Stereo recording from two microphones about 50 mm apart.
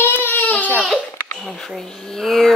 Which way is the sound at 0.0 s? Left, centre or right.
Left.